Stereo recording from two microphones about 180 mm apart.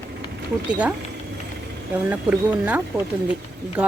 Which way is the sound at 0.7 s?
5° right (ahead or behind).